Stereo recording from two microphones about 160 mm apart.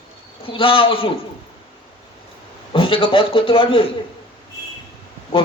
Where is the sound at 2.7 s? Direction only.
35° left (ahead or behind).